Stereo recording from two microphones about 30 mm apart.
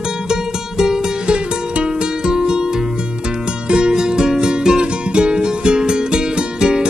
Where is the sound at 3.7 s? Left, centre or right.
Right.